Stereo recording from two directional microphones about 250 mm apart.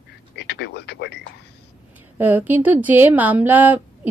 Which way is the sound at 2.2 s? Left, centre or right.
Centre.